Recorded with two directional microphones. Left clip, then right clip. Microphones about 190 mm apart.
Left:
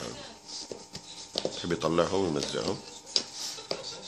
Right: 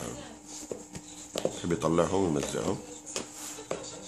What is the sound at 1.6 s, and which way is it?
Speech, centre (ahead or behind).